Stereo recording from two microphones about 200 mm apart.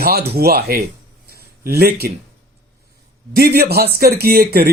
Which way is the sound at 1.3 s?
50° right (ahead or behind).